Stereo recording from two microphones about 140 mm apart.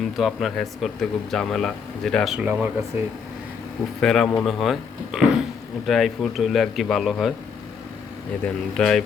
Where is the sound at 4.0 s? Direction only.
5° left (ahead or behind).